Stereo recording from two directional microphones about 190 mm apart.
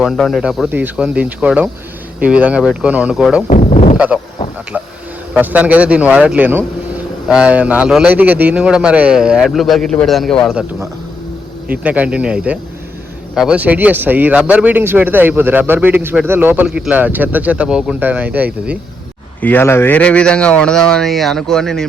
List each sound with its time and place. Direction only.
0.0 s a man's voice: centre (ahead or behind)
3.5 s a sound: 40° left (ahead or behind)
3.9 s speech: 5° right (ahead or behind)
4.7 s a sound: 10° right (ahead or behind)
5.3 s a man's voice: 10° right (ahead or behind)
11.7 s speech: 10° right (ahead or behind)
19.4 s a man's voice: 10° left (ahead or behind)